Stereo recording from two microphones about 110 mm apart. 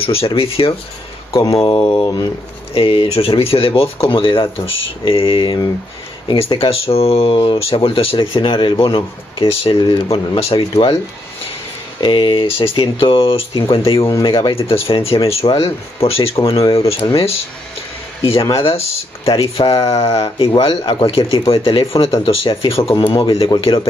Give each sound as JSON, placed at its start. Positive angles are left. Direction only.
{"t": 0.0, "sound": "speech", "side_deg": 60}
{"t": 1.3, "sound": "speech", "side_deg": 30}
{"t": 1.6, "sound": "speech", "side_deg": 55}
{"t": 6.2, "sound": "speech", "side_deg": 60}
{"t": 12.0, "sound": "speech", "side_deg": 45}
{"t": 18.6, "sound": "speech", "side_deg": 60}
{"t": 19.8, "sound": "speech", "side_deg": 35}
{"t": 20.6, "sound": "speech", "side_deg": 50}